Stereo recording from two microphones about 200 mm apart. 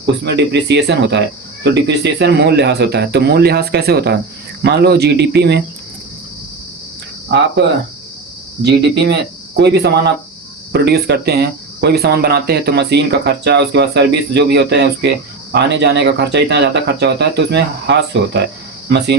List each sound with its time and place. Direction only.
0.0 s speech: 60° right (ahead or behind)
8.6 s speech: 60° right (ahead or behind)